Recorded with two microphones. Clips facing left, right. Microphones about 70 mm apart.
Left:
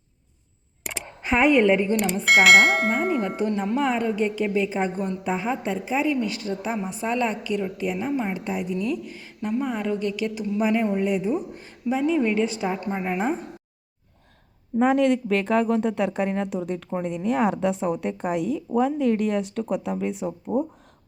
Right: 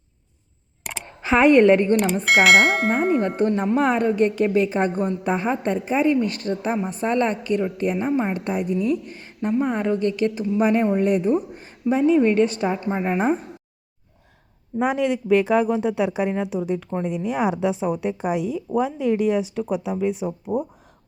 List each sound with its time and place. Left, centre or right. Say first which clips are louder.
1.2 s a woman's voice: right 4 dB; right
2.2 s speech: left 1 dB; centre
3.2 s a woman's voice: right 4 dB; right
3.8 s a woman's voice: right 4 dB; right
8.3 s a woman's voice: right 4 dB; right
10.6 s a woman's voice: right 3 dB; right
13.0 s a woman's voice: right 5 dB; right
14.8 s speech: left 2 dB; centre